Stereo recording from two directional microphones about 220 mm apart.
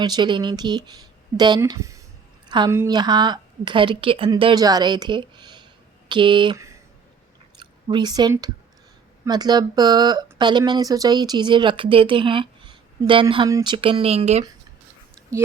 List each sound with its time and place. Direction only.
0.0 s speech: 20° right (ahead or behind)